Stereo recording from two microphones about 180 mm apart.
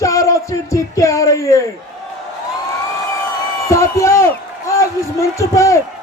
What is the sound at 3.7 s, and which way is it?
A man's voice, 15° left (ahead or behind).